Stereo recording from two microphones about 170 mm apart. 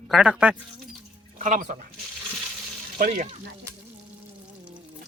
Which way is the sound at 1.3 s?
45° right (ahead or behind).